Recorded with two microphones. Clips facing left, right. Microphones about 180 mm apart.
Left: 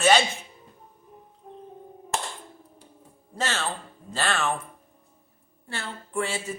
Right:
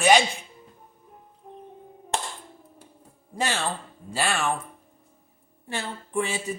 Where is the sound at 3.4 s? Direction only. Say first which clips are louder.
Right 2 dB; 15° right (ahead or behind).